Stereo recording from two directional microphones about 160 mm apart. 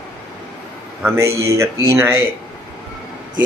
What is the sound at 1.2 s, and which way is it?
Speech, 20° right (ahead or behind).